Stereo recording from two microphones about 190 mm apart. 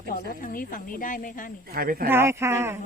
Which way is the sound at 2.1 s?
15° right (ahead or behind).